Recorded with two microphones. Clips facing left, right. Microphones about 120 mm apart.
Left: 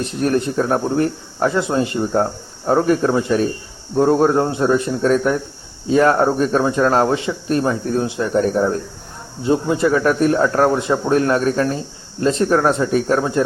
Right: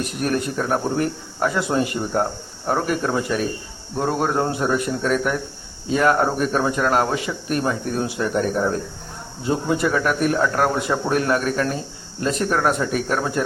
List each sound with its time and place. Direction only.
0.0 s speech: 30° left (ahead or behind)